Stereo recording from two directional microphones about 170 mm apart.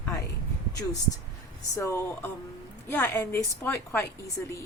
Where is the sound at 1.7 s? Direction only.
15° left (ahead or behind).